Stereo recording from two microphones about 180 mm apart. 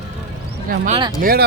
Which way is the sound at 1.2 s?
55° right (ahead or behind).